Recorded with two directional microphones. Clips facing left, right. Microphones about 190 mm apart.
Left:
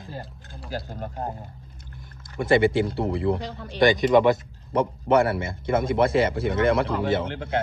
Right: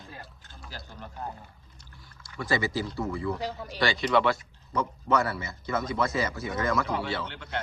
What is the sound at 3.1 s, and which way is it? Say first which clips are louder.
Speech: left 9 dB; 60° left (ahead or behind).